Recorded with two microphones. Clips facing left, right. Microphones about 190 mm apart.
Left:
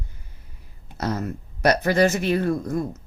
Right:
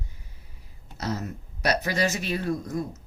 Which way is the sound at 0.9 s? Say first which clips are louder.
Left 4 dB; 55° left (ahead or behind).